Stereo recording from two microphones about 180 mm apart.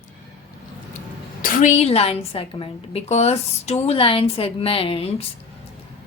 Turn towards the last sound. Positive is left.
turn(degrees=30)  # may be behind; listen again after turning